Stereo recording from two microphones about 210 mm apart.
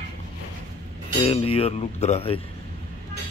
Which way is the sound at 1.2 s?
25° left (ahead or behind).